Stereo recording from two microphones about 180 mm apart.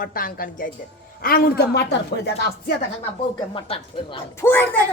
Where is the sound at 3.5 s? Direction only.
30° left (ahead or behind).